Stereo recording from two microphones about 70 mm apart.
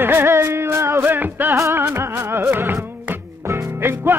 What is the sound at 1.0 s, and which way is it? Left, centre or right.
Music, right.